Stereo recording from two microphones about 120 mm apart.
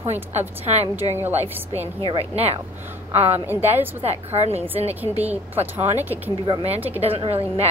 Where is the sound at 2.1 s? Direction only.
55° right (ahead or behind).